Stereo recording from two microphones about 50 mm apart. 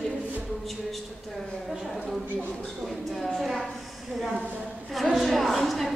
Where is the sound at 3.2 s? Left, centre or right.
Centre.